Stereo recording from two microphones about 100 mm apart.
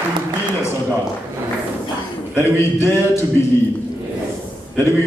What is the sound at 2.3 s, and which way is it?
Speech, 25° left (ahead or behind).